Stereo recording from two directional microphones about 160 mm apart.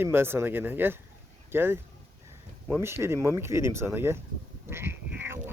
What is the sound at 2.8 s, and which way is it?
Speech, 15° right (ahead or behind).